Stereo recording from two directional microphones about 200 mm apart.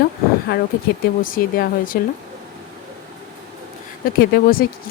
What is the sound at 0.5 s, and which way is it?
Speech, 50° left (ahead or behind).